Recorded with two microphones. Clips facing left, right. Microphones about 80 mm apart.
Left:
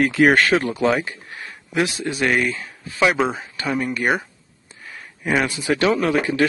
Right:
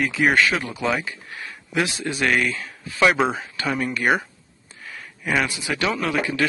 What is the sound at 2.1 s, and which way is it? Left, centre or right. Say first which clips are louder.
Speech: left 1 dB; left.